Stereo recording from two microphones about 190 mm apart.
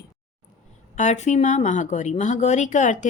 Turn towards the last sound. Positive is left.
turn(degrees=40)  # may be behind; listen again after turning